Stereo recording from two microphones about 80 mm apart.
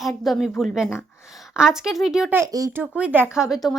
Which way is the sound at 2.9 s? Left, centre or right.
Centre.